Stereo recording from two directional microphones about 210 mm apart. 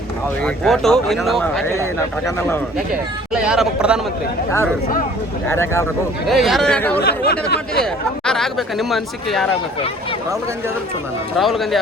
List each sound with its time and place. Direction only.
0.4 s speech: centre (ahead or behind)
1.7 s speech: 15° left (ahead or behind)
3.3 s speech: 5° right (ahead or behind)
5.5 s speech: 10° left (ahead or behind)
6.2 s speech: centre (ahead or behind)
7.0 s speech: 50° left (ahead or behind)
8.2 s speech: 5° left (ahead or behind)
11.3 s speech: centre (ahead or behind)